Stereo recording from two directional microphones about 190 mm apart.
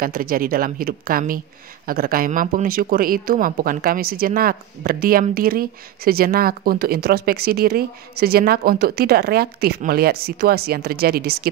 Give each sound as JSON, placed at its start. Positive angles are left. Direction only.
{"t": 0.0, "sound": "speech", "side_deg": -50}